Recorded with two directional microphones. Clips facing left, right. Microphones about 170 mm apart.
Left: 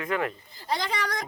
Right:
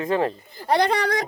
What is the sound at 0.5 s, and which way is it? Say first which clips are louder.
Speech: right 10 dB; 60° right (ahead or behind).